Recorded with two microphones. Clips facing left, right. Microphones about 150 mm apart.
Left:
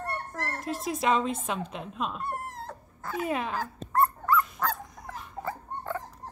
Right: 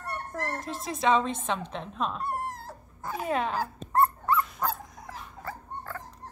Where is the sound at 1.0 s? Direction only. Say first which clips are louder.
Right 2 dB; 5° left (ahead or behind).